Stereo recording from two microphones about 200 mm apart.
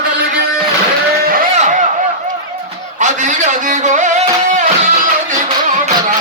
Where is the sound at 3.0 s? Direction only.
40° right (ahead or behind).